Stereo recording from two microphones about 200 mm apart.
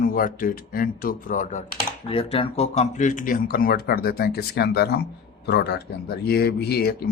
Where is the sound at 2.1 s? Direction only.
30° left (ahead or behind).